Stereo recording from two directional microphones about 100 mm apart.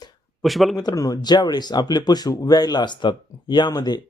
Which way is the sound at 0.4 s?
Centre (ahead or behind).